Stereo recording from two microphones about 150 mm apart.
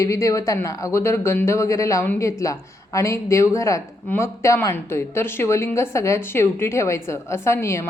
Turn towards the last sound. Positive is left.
turn(degrees=20)  # may be behind; listen again after turning